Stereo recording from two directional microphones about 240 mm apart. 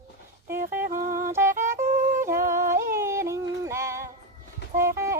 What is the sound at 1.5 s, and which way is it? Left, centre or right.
Music, right.